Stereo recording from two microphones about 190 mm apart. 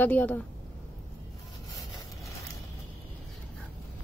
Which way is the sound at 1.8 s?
20° left (ahead or behind).